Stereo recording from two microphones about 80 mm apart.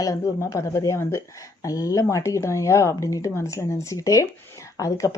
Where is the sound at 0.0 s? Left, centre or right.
Left.